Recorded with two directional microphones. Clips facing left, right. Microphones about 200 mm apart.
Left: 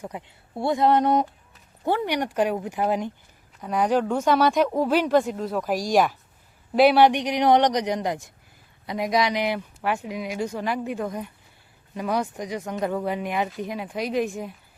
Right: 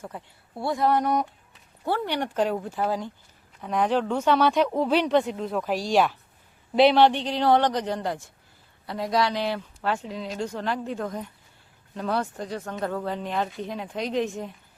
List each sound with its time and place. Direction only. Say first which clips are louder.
0.0 s speech: left 3 dB; 20° left (ahead or behind)